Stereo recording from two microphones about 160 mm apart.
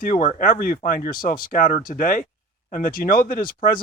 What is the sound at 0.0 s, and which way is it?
Speech, 55° left (ahead or behind).